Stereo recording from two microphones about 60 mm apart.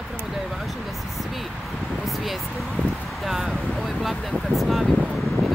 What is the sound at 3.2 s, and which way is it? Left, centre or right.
Speech, centre.